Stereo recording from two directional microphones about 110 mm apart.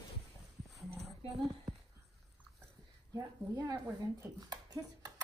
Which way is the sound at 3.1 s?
35° right (ahead or behind).